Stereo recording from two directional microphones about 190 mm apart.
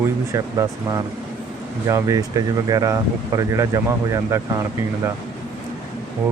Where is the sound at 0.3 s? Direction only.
15° right (ahead or behind).